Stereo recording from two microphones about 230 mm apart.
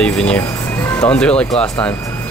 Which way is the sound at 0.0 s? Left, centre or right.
Centre.